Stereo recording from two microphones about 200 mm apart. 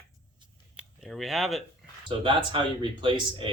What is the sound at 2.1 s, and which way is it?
Speech, 25° right (ahead or behind).